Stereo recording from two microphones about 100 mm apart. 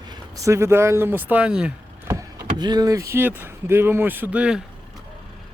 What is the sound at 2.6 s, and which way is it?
Speech, 40° right (ahead or behind).